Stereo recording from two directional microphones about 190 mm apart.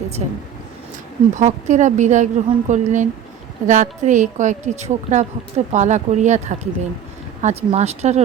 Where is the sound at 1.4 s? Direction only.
40° right (ahead or behind).